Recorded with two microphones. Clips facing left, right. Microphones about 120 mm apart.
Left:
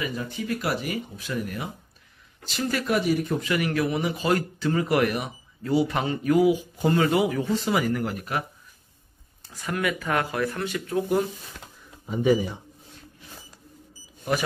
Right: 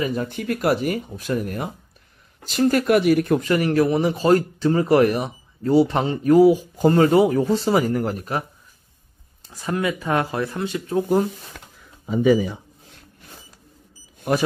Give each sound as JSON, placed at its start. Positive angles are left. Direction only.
{"t": 0.0, "sound": "speech", "side_deg": -50}
{"t": 3.0, "sound": "speech", "side_deg": -65}
{"t": 3.3, "sound": "speech", "side_deg": -40}
{"t": 9.5, "sound": "speech", "side_deg": -30}